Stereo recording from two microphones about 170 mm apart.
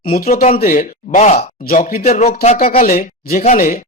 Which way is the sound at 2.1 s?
45° left (ahead or behind).